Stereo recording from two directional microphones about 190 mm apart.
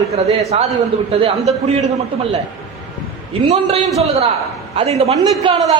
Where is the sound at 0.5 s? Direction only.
30° right (ahead or behind).